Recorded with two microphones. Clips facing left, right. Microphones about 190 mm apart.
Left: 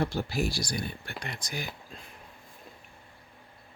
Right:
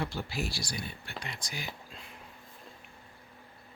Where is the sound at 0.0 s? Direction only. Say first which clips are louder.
Left 6 dB; 45° left (ahead or behind).